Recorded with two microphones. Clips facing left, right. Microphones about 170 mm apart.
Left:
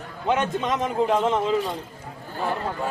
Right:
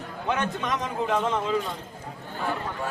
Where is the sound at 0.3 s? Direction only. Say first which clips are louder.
Left 4 dB; 20° left (ahead or behind).